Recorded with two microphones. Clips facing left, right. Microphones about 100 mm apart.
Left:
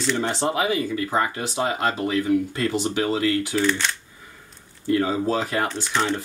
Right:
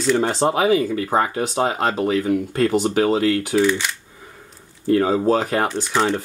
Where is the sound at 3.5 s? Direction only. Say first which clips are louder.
Right 4 dB; 10° right (ahead or behind).